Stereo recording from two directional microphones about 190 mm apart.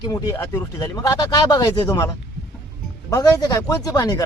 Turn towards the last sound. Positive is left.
turn(degrees=20)  # may be behind; listen again after turning